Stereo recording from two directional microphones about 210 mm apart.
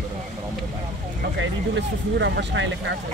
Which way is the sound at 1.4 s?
55° right (ahead or behind).